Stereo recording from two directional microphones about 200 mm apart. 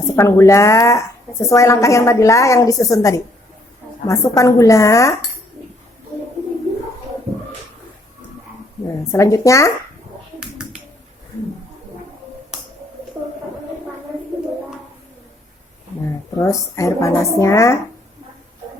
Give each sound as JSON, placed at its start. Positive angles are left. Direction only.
{"t": 0.2, "sound": "a woman's voice", "side_deg": 15}
{"t": 9.1, "sound": "a woman's voice", "side_deg": 15}
{"t": 16.4, "sound": "a woman's voice", "side_deg": 15}